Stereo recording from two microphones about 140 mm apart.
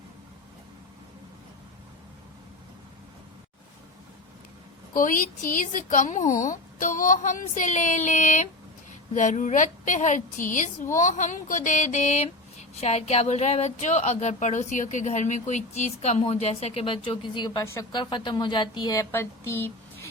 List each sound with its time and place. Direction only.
4.9 s a woman's voice: 75° left (ahead or behind); by 20.1 s 15° left (ahead or behind)